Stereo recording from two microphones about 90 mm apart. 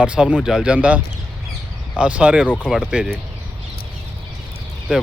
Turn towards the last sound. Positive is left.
turn(degrees=-10)  # may be behind; listen again after turning